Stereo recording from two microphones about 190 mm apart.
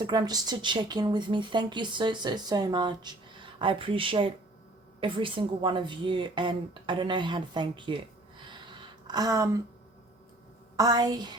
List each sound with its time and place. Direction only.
0.0 s speech: 25° right (ahead or behind)
8.4 s a sound: 25° right (ahead or behind)
10.8 s speech: 20° right (ahead or behind)